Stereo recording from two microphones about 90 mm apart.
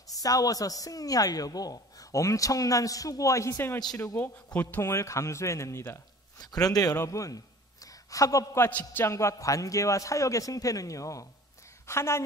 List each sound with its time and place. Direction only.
0.1 s a woman's voice: 40° left (ahead or behind)
4.2 s a man's voice: 15° left (ahead or behind)
4.8 s a woman's voice: 35° left (ahead or behind)
6.3 s a man's voice: 45° left (ahead or behind)
8.6 s a man's voice: 20° left (ahead or behind)
9.0 s a woman's voice: 35° left (ahead or behind)